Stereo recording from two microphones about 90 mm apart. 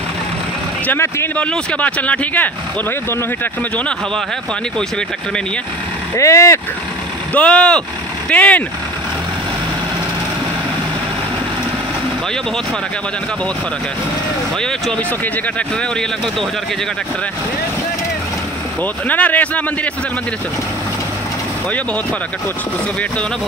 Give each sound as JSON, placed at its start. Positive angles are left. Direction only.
{"t": 0.8, "sound": "speech", "side_deg": 30}
{"t": 1.3, "sound": "speech", "side_deg": 15}
{"t": 6.1, "sound": "speech", "side_deg": 30}
{"t": 7.3, "sound": "speech", "side_deg": 10}
{"t": 19.0, "sound": "speech", "side_deg": 15}